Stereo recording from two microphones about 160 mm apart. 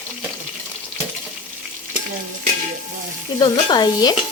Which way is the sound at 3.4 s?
25° left (ahead or behind).